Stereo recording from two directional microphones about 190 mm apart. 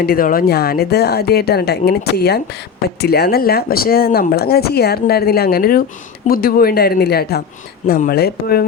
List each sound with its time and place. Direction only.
0.0 s a woman's voice: 50° left (ahead or behind)